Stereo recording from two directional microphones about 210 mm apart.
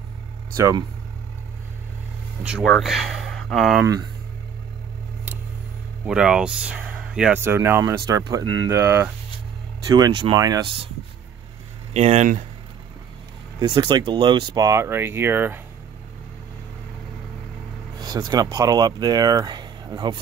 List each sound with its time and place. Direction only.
0.6 s speech: 15° right (ahead or behind)
2.4 s speech: centre (ahead or behind)
3.8 s speech: 15° right (ahead or behind)
6.0 s speech: 5° right (ahead or behind)
11.9 s speech: 30° right (ahead or behind)
13.6 s speech: 20° right (ahead or behind)
17.9 s speech: 20° right (ahead or behind)